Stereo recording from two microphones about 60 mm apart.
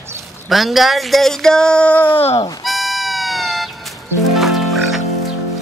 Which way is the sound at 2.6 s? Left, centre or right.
Centre.